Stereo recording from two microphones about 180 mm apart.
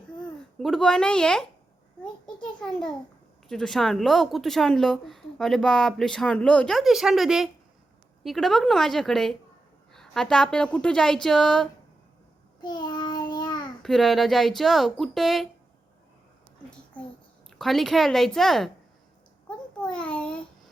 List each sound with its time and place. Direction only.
0.2 s speech: 5° left (ahead or behind)
2.2 s a sound: 5° left (ahead or behind)
3.5 s a woman's voice: centre (ahead or behind)
12.6 s child singing: 25° left (ahead or behind)
13.8 s a woman's voice: centre (ahead or behind)
17.6 s a woman's voice: centre (ahead or behind)
19.5 s a sound: 5° left (ahead or behind)